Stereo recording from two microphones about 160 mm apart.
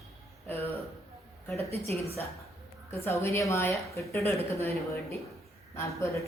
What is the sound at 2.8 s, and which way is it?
A woman's voice, 15° left (ahead or behind).